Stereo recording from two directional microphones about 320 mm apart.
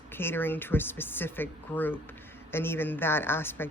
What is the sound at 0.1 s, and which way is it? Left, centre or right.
A woman's voice, centre.